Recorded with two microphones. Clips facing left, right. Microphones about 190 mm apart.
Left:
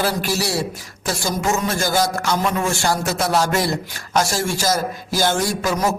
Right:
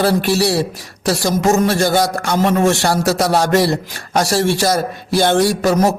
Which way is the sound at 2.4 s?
35° right (ahead or behind).